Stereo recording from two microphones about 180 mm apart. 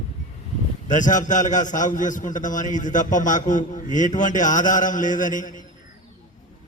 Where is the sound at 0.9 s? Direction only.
45° left (ahead or behind).